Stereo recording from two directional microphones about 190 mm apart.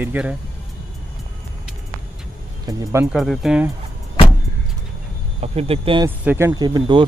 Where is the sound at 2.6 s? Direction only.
15° right (ahead or behind).